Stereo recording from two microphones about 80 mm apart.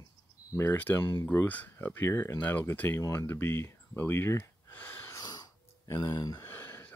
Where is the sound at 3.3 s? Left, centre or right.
Left.